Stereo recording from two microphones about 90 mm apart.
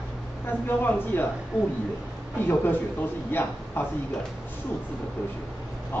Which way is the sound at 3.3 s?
25° left (ahead or behind).